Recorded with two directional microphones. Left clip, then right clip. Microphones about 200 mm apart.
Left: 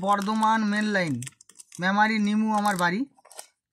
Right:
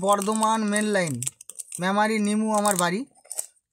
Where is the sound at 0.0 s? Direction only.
25° right (ahead or behind).